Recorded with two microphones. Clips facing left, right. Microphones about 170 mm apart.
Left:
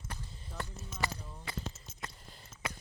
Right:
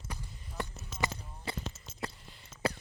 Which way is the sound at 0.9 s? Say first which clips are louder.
Right 2 dB; 90° right.